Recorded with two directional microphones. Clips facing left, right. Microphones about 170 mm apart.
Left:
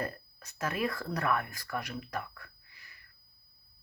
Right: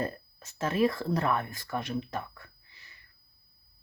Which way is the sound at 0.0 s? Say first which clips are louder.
Right 4 dB; 25° right (ahead or behind).